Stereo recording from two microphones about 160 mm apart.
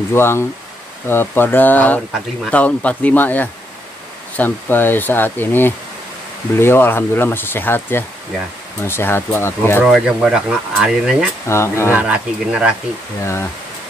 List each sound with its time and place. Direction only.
0.1 s speech: 15° left (ahead or behind)
9.8 s speech: 5° right (ahead or behind)
11.4 s speech: 15° left (ahead or behind)
11.9 s speech: 10° right (ahead or behind)
13.2 s speech: 15° left (ahead or behind)